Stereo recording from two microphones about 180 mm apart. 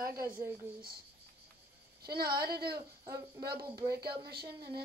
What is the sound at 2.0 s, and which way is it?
Speech, 60° right (ahead or behind).